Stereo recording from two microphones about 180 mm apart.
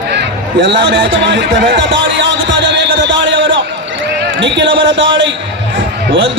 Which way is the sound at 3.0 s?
90° right.